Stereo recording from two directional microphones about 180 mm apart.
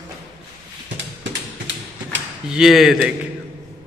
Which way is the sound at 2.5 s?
Centre (ahead or behind).